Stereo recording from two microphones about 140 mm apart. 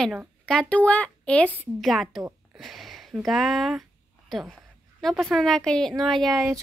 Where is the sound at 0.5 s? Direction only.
10° left (ahead or behind).